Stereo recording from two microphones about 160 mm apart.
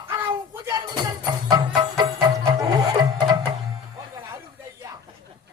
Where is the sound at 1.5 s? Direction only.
25° right (ahead or behind).